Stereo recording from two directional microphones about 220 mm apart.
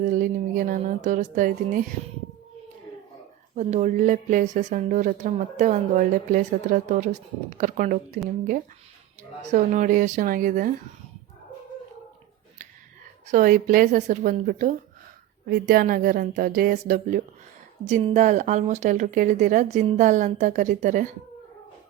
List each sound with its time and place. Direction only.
0.0 s speech: 35° right (ahead or behind)
3.5 s speech: 30° right (ahead or behind)
9.5 s speech: 30° right (ahead or behind)
13.2 s speech: 35° right (ahead or behind)